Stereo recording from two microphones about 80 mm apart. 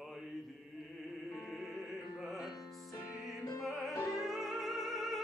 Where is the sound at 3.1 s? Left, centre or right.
Left.